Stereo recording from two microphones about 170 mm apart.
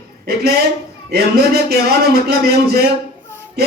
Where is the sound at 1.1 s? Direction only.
70° right (ahead or behind).